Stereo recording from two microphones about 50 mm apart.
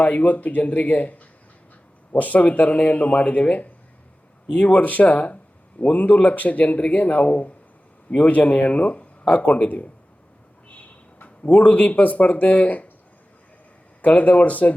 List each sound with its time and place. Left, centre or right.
0.0 s speech: left
11.4 s speech: left
14.0 s speech: left